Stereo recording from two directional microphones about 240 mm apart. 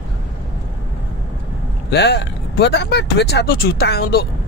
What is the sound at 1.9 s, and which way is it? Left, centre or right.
Speech, left.